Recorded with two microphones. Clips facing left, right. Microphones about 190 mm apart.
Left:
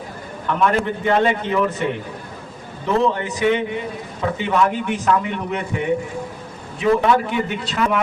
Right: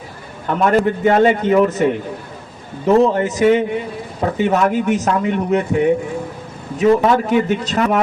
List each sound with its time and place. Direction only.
0.4 s a man's voice: 45° right (ahead or behind)
6.7 s a man's voice: 40° right (ahead or behind)